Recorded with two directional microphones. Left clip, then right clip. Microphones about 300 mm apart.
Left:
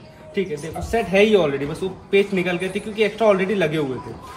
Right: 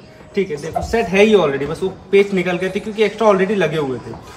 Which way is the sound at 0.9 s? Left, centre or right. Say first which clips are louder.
Right 3 dB; centre.